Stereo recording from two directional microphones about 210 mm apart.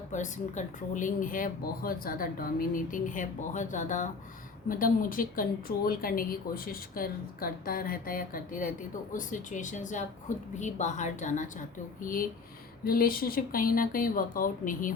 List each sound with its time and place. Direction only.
0.1 s a woman's voice: 35° left (ahead or behind)